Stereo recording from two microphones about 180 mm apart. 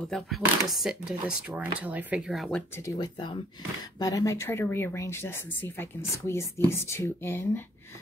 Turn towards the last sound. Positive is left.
turn(degrees=10)  # may be behind; listen again after turning